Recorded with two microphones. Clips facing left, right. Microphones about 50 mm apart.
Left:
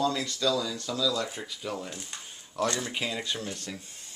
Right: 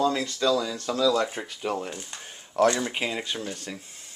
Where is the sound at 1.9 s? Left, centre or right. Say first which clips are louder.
Right 3 dB; right.